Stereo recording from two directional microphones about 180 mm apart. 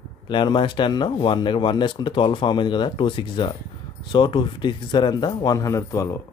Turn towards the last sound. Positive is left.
turn(degrees=15)  # may be behind; listen again after turning